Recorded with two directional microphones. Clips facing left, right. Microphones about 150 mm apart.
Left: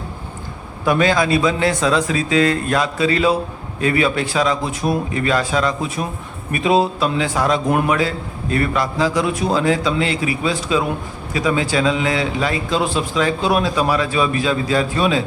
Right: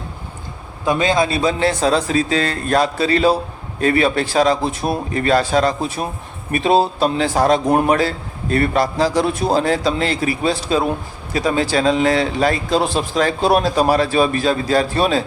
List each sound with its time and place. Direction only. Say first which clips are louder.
0.9 s a man's voice: left 1 dB; 25° right (ahead or behind)